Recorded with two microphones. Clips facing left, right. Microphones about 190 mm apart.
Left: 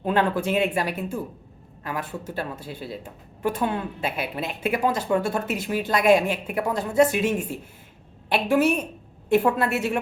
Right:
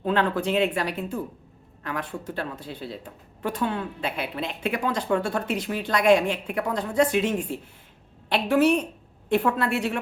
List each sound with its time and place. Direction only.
0.0 s speech: 10° left (ahead or behind)